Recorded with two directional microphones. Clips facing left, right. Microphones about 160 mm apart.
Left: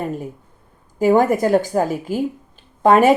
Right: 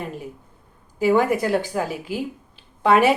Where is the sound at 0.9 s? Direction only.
45° left (ahead or behind).